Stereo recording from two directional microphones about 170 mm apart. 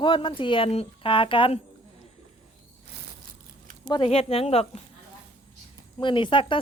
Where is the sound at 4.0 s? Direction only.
35° left (ahead or behind).